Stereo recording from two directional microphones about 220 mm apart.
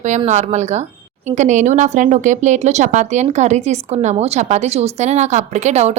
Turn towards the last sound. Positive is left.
turn(degrees=-30)  # may be behind; listen again after turning